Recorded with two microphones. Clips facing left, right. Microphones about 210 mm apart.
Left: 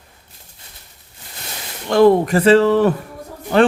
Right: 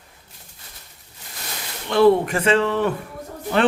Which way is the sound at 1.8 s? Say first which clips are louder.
Left 3 dB; 40° left (ahead or behind).